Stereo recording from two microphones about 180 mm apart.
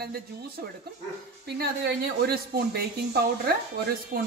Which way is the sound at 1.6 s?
60° right (ahead or behind).